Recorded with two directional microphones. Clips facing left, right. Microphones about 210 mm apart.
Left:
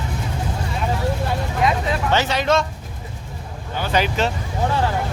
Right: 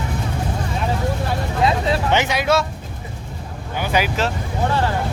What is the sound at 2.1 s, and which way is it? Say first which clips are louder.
Speech: left 1 dB; 15° right (ahead or behind).